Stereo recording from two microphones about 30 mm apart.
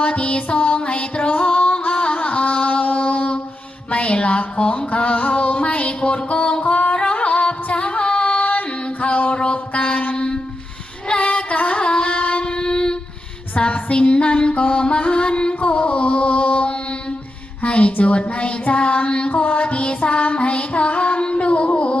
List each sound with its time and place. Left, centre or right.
0.0 s music: left
0.8 s music: left
1.3 s music: left
2.0 s music: left
9.3 s music: left
10.2 s a sound: left
11.2 s music: left
13.6 s music: left
14.1 s music: left
14.3 s music: left
15.6 s carnatic music: left
17.6 s a sound: left
19.4 s music: left